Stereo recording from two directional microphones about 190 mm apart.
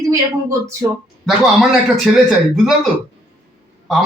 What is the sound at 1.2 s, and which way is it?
Speech, centre (ahead or behind).